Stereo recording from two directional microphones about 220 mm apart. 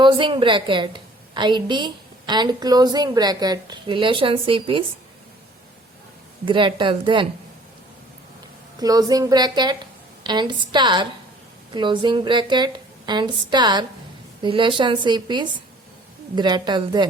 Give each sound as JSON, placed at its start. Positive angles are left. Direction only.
{"t": 0.0, "sound": "a woman's voice", "side_deg": -20}
{"t": 6.4, "sound": "a woman's voice", "side_deg": -20}
{"t": 8.8, "sound": "a woman's voice", "side_deg": -15}